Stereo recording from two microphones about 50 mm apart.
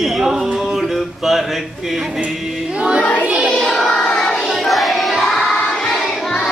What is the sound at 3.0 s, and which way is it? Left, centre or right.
Child singing, left.